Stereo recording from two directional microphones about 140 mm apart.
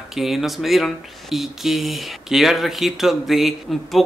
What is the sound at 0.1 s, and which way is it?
Speech, centre (ahead or behind).